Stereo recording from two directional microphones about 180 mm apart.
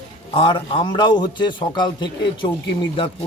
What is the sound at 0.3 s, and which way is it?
Speech, 30° left (ahead or behind).